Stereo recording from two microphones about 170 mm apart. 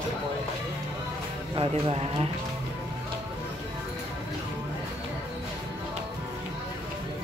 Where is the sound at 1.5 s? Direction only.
35° right (ahead or behind).